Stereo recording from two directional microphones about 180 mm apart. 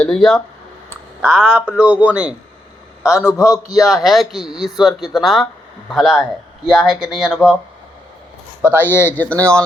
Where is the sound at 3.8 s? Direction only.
Centre (ahead or behind).